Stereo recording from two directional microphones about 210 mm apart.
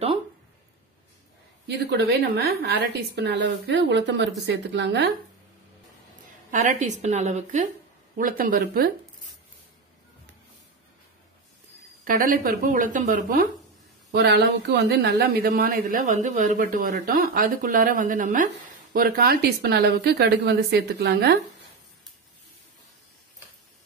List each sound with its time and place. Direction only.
1.7 s a woman's voice: 55° right (ahead or behind)
6.5 s speech: 35° right (ahead or behind)
12.0 s speech: 40° right (ahead or behind)
14.1 s a woman's voice: 55° right (ahead or behind)